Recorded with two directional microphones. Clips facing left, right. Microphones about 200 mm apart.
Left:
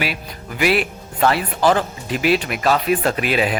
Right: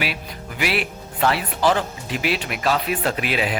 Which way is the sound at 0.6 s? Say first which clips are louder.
Left 6 dB; 45° left (ahead or behind).